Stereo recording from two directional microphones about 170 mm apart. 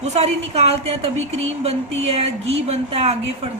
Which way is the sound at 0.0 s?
40° right (ahead or behind).